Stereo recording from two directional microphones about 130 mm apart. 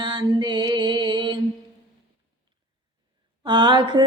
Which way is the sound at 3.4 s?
40° right (ahead or behind).